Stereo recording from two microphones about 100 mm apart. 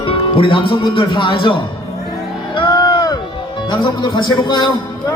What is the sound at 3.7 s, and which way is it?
Speech, 50° left (ahead or behind).